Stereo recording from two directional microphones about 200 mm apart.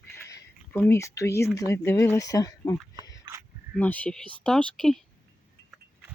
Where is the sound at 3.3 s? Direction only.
25° right (ahead or behind).